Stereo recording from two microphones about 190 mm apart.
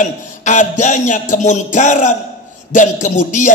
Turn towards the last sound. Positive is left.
turn(degrees=40)  # may be behind; listen again after turning